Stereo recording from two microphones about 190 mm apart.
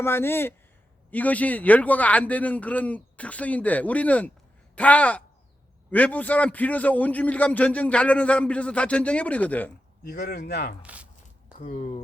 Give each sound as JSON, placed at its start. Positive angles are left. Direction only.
{"t": 0.0, "sound": "a man's voice", "side_deg": 10}
{"t": 10.0, "sound": "speech", "side_deg": 60}
{"t": 10.8, "sound": "a sound", "side_deg": -5}
{"t": 11.5, "sound": "speech", "side_deg": 40}